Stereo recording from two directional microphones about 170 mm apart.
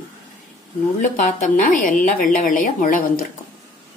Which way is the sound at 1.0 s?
50° left (ahead or behind).